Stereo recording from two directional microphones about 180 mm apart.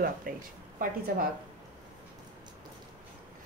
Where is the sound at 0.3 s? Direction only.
50° right (ahead or behind).